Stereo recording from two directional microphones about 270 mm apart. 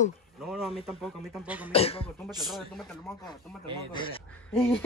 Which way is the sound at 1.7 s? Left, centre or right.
Left.